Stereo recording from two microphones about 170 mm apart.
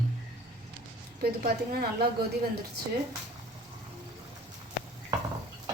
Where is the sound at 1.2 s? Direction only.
65° right (ahead or behind).